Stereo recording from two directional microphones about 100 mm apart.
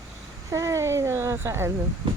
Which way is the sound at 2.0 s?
55° right (ahead or behind).